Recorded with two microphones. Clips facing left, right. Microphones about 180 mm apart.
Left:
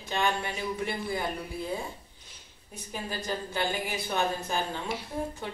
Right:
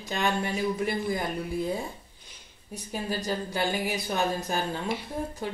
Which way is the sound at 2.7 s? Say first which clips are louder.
Right 5 dB; 40° right (ahead or behind).